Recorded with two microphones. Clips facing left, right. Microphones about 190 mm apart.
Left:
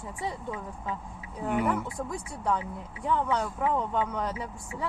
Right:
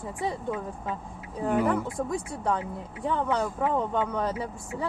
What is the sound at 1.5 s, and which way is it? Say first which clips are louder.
Speech: right 3 dB; 35° right (ahead or behind).